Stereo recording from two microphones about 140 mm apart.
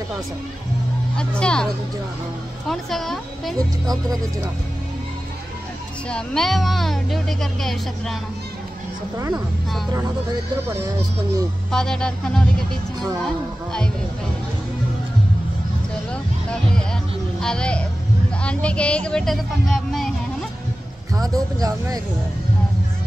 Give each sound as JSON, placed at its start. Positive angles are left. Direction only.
{"t": 1.1, "sound": "speech", "side_deg": 5}
{"t": 2.7, "sound": "speech", "side_deg": 0}
{"t": 3.5, "sound": "speech", "side_deg": -25}
{"t": 6.0, "sound": "speech", "side_deg": 5}
{"t": 9.3, "sound": "speech", "side_deg": 0}
{"t": 11.7, "sound": "speech", "side_deg": 5}
{"t": 16.1, "sound": "music", "side_deg": 5}
{"t": 17.4, "sound": "speech", "side_deg": 5}
{"t": 21.1, "sound": "speech", "side_deg": -25}